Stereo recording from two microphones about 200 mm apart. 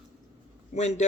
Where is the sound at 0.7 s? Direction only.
35° left (ahead or behind).